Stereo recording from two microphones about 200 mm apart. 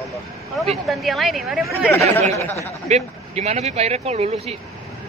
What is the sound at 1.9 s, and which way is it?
Speech, 10° left (ahead or behind).